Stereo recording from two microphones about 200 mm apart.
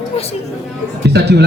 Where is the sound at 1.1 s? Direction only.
55° right (ahead or behind).